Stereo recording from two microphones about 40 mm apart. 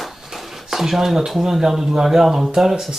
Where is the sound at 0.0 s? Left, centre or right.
Centre.